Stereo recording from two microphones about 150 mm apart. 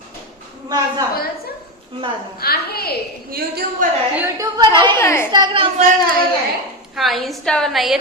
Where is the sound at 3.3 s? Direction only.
80° right.